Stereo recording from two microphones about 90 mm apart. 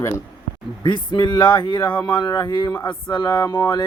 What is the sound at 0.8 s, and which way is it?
Speech, 55° left (ahead or behind).